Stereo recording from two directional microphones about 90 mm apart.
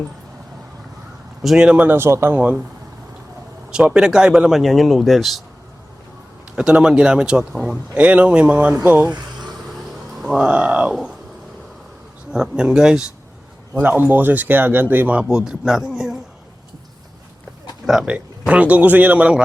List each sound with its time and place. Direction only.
1.4 s speech: 5° right (ahead or behind); by 2.3 s 30° right (ahead or behind)
2.3 s speech: 15° right (ahead or behind)
3.7 s speech: 10° right (ahead or behind)
6.6 s speech: 10° right (ahead or behind)
9.0 s a sound: 55° right (ahead or behind)
10.2 s speech: 5° right (ahead or behind)
10.9 s speech: 5° right (ahead or behind)
12.3 s speech: 10° right (ahead or behind)
13.7 s speech: 20° right (ahead or behind)
17.8 s speech: 5° right (ahead or behind)